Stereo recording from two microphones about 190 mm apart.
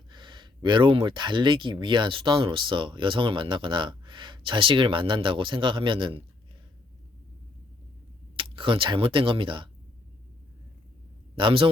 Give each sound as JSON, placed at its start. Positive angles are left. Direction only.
{"t": 0.1, "sound": "speech", "side_deg": -25}
{"t": 8.4, "sound": "speech", "side_deg": -30}
{"t": 11.3, "sound": "speech", "side_deg": -25}